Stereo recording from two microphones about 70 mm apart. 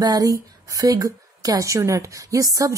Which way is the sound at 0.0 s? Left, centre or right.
Right.